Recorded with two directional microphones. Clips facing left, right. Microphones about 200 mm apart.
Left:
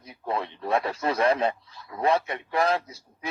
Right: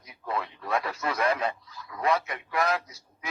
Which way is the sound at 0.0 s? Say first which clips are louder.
Left 3 dB; 30° left (ahead or behind).